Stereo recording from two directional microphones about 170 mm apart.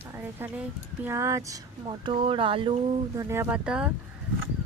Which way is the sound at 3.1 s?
15° right (ahead or behind).